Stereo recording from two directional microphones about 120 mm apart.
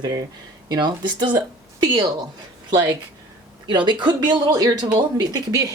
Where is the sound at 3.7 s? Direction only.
40° right (ahead or behind).